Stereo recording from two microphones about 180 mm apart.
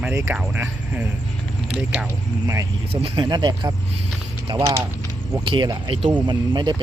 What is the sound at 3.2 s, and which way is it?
Speech, 25° right (ahead or behind).